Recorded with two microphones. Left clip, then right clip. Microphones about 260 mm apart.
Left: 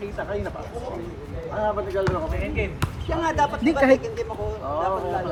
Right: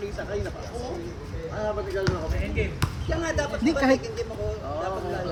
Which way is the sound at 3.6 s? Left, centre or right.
Centre.